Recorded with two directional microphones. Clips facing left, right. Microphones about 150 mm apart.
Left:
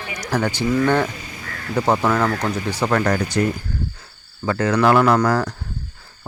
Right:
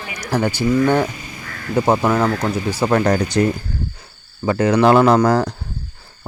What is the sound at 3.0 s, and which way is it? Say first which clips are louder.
Speech: right 3 dB; 30° right (ahead or behind).